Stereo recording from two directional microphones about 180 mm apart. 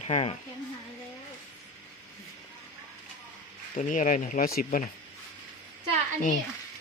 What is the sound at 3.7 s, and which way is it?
Speech, 45° left (ahead or behind).